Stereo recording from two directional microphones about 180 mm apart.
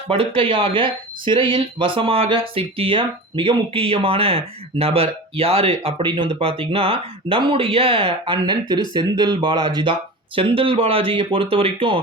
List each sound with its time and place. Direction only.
0.1 s speech: 30° right (ahead or behind)